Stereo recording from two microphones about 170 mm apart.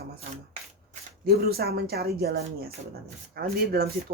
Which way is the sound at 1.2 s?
65° right (ahead or behind).